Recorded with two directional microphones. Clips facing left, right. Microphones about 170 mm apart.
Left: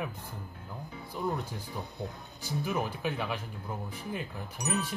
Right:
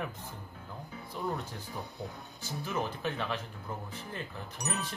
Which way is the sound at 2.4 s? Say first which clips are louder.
Left 3 dB; 10° left (ahead or behind).